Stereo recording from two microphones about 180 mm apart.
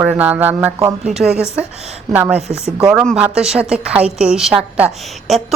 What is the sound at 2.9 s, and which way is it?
A woman's voice, centre (ahead or behind).